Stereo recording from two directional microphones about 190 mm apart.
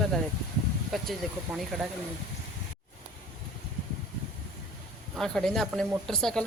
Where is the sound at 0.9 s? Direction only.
Centre (ahead or behind).